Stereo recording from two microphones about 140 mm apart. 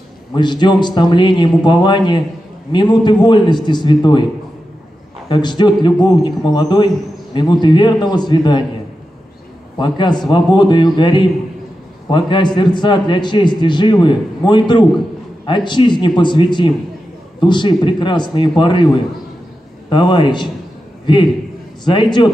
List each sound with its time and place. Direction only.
0.3 s a man's voice: 35° left (ahead or behind)
5.3 s a man's voice: 30° left (ahead or behind)
9.8 s a man's voice: 30° left (ahead or behind)
19.9 s a man's voice: 35° left (ahead or behind)